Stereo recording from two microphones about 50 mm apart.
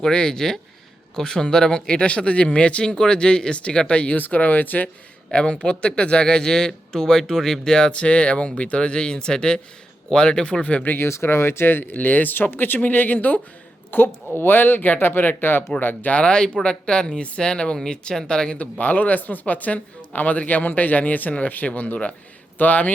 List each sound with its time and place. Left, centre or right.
0.0 s speech: centre; by 4.9 s left
5.3 s speech: left
10.9 s speech: left
16.1 s speech: centre
18.5 s speech: left